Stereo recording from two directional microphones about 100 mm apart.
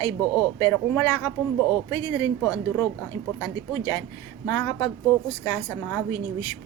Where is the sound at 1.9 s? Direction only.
40° left (ahead or behind).